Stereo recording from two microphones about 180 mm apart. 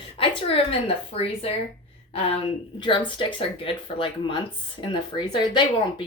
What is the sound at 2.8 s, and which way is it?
Speech, 25° left (ahead or behind).